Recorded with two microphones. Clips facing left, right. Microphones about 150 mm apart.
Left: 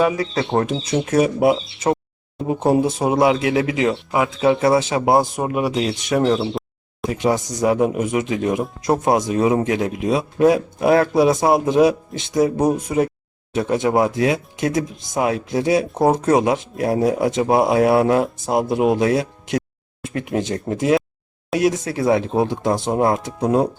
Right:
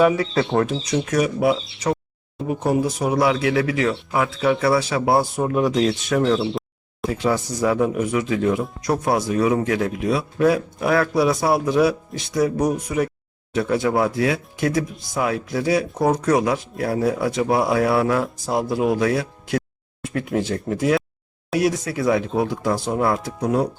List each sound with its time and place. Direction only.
0.5 s speech: 20° left (ahead or behind)